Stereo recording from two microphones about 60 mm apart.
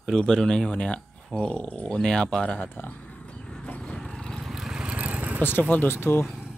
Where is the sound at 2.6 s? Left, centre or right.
Left.